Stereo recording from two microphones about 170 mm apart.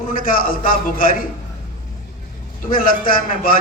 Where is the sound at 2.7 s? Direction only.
55° left (ahead or behind).